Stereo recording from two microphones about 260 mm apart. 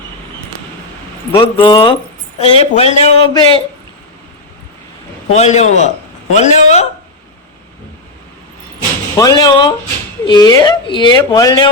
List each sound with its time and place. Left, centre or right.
1.3 s speech: centre
5.3 s speech: left
9.1 s a woman's voice: centre